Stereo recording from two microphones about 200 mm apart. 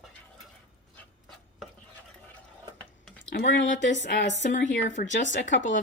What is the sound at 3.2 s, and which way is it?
Speech, 60° left (ahead or behind).